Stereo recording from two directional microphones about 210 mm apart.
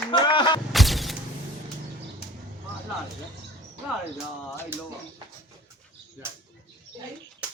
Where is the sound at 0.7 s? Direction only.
Centre (ahead or behind).